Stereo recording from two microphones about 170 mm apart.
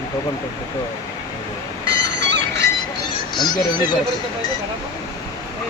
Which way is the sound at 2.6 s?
25° left (ahead or behind).